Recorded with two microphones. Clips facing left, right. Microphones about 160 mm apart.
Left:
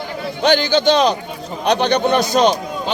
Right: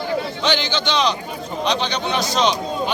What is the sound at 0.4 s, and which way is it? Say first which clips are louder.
Speech: left 11 dB; 50° left (ahead or behind).